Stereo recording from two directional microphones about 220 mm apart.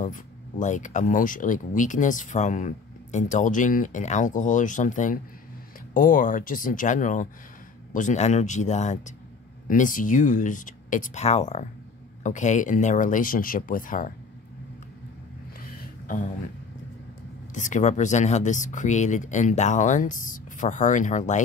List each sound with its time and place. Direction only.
0.0 s speech: 35° left (ahead or behind)
17.6 s speech: 35° left (ahead or behind)